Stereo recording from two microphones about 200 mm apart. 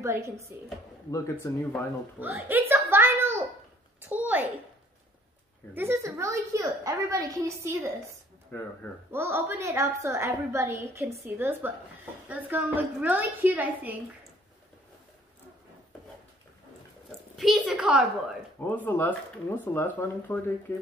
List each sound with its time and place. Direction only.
0.0 s a woman's voice: 15° right (ahead or behind)
1.1 s speech: 15° left (ahead or behind)
2.1 s a sound: 10° right (ahead or behind)
5.8 s a woman's voice: 15° right (ahead or behind)
9.1 s a woman's voice: 10° right (ahead or behind)
17.4 s a woman's voice: centre (ahead or behind)
18.8 s speech: 10° left (ahead or behind)